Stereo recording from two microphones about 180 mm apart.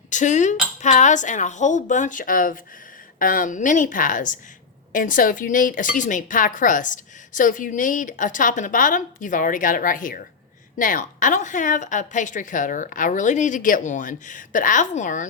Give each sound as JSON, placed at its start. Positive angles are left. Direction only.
{"t": 0.1, "sound": "speech", "side_deg": 45}